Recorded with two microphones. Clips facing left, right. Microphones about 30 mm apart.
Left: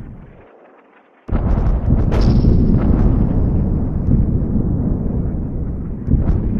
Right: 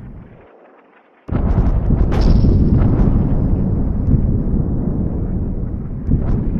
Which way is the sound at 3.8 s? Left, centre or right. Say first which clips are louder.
Even; right.